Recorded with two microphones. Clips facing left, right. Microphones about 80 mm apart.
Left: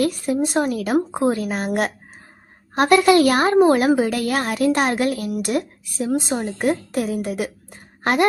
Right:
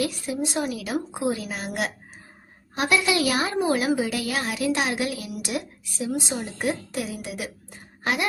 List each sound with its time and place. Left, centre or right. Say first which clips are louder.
0.0 s a woman's voice: left 7 dB; left